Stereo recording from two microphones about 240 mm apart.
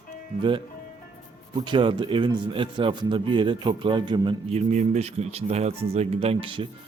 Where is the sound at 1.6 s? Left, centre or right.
Right.